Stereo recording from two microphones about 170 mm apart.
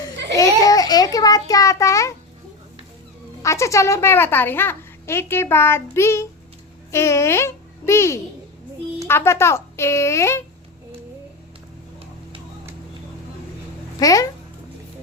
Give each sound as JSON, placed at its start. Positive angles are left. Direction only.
{"t": 0.3, "sound": "a sound", "side_deg": 20}
{"t": 3.4, "sound": "a child's voice", "side_deg": 15}
{"t": 14.0, "sound": "a child's voice", "side_deg": 20}